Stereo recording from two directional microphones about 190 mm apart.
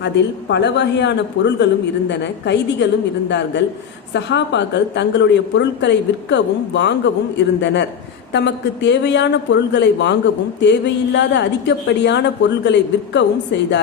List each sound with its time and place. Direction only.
0.0 s a woman's voice: 65° left (ahead or behind)